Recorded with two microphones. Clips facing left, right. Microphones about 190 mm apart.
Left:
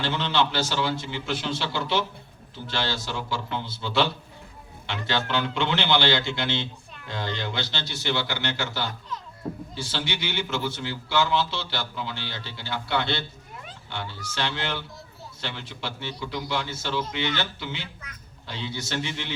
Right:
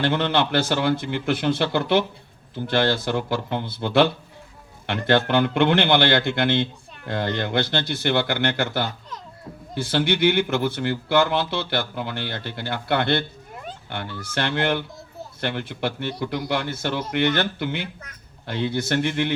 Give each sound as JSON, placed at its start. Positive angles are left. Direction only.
{"t": 0.0, "sound": "a man's voice", "side_deg": -55}